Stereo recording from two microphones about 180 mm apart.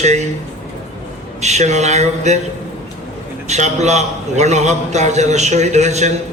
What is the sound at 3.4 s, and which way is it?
A man's voice, 40° right (ahead or behind).